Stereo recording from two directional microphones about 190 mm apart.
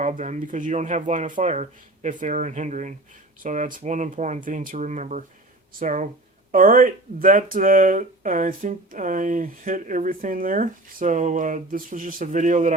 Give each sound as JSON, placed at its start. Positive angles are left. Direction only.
{"t": 0.2, "sound": "speech", "side_deg": -45}